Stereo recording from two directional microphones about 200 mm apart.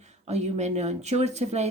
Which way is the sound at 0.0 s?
35° right (ahead or behind).